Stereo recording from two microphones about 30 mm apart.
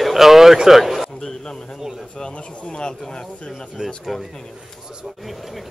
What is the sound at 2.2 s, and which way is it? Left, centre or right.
Speech, left.